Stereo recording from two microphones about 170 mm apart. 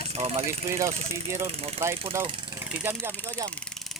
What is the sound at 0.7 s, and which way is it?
Speech, 15° right (ahead or behind).